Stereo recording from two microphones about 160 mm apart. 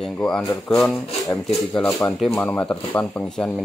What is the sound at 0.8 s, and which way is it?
Speech, 5° left (ahead or behind).